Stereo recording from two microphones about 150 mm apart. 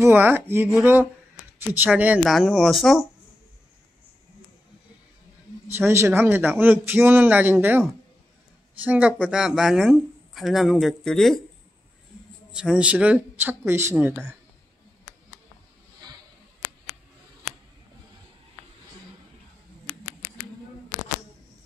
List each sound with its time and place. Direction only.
0.0 s speech: 15° right (ahead or behind)
5.8 s speech: 15° right (ahead or behind)
8.8 s speech: 10° right (ahead or behind)
12.5 s speech: 5° right (ahead or behind)
16.0 s a sound: 25° right (ahead or behind)